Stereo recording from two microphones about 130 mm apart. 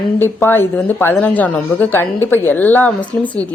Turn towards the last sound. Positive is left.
turn(degrees=15)  # may be behind; listen again after turning